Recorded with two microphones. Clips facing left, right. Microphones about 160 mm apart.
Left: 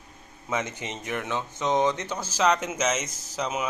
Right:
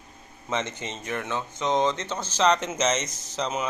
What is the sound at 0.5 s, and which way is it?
A man's voice, 15° left (ahead or behind).